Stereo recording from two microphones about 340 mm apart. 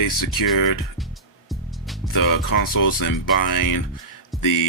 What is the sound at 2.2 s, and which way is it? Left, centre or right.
Speech, left.